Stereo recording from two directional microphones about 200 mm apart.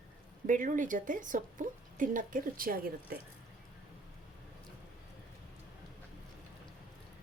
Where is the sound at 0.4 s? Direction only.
40° right (ahead or behind).